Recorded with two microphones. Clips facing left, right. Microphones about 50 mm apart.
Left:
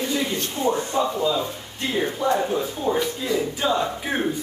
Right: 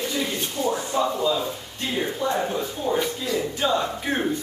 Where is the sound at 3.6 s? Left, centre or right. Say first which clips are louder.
Even; centre.